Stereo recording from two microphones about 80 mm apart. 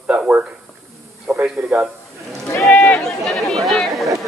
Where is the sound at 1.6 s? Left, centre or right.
Right.